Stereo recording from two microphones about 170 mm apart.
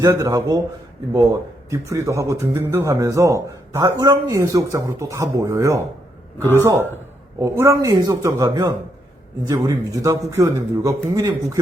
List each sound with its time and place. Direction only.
0.0 s a man's voice: 25° right (ahead or behind)